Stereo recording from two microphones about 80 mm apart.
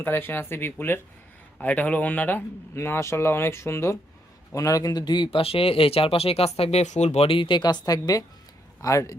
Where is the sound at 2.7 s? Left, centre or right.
Left.